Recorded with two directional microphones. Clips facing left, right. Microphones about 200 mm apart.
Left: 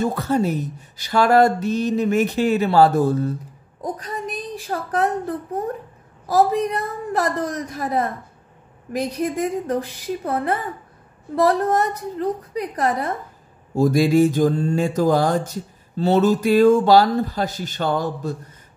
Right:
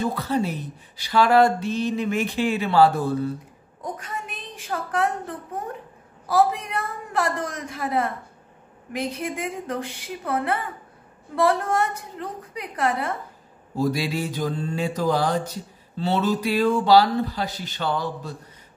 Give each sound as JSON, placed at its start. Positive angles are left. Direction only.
{"t": 0.0, "sound": "mantra", "side_deg": 45}
{"t": 3.8, "sound": "a woman's voice", "side_deg": 35}
{"t": 13.7, "sound": "mantra", "side_deg": 50}